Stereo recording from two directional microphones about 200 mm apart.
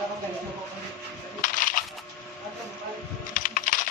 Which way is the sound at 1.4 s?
40° left (ahead or behind).